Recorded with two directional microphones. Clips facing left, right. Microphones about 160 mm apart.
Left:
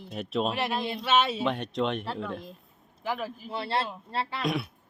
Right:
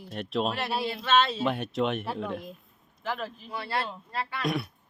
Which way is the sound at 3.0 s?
10° left (ahead or behind).